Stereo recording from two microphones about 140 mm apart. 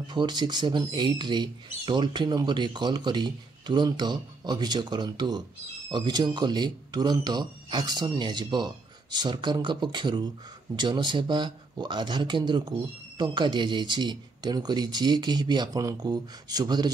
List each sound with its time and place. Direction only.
0.1 s speech: 30° right (ahead or behind)